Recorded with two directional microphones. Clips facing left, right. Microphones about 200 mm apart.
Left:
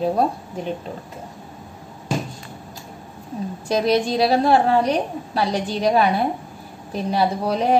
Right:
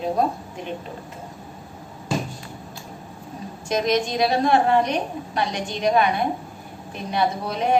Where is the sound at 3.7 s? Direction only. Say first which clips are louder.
Left 3 dB; 35° left (ahead or behind).